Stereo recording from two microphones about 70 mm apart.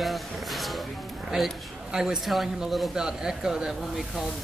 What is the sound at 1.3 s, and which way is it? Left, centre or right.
A man's voice, centre.